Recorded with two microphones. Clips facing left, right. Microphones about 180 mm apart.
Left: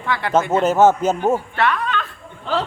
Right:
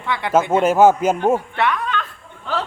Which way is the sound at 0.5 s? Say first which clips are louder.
Right 1 dB; 10° right (ahead or behind).